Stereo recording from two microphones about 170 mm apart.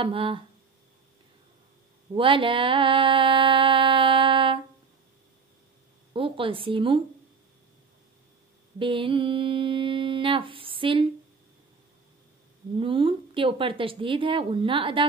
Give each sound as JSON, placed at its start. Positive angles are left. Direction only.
{"t": 0.0, "sound": "mantra", "side_deg": -30}
{"t": 2.1, "sound": "mantra", "side_deg": -30}
{"t": 6.1, "sound": "mantra", "side_deg": -30}
{"t": 8.7, "sound": "mantra", "side_deg": -30}
{"t": 12.7, "sound": "mantra", "side_deg": -30}